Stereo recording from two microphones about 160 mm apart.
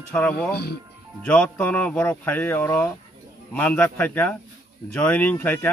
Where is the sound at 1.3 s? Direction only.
10° left (ahead or behind).